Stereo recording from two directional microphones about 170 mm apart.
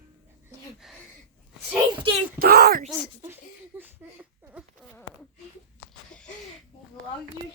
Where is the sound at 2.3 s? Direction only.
65° right (ahead or behind).